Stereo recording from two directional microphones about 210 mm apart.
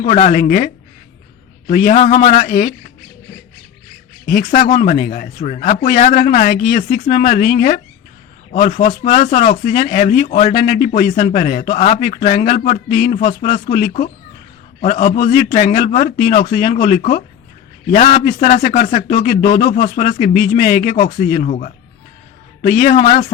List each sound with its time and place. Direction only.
0.0 s a man's voice: 35° left (ahead or behind)
4.3 s a man's voice: 40° left (ahead or behind)